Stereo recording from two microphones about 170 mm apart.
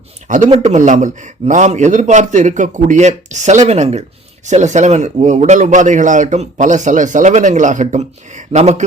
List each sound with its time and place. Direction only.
0.3 s a man's voice: 45° right (ahead or behind)